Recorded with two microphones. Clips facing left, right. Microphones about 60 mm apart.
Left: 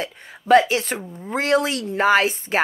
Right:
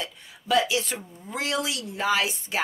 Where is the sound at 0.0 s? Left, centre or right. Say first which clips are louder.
Left 6 dB; left.